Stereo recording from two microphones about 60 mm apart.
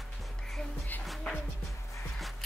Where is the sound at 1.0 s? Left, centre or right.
Centre.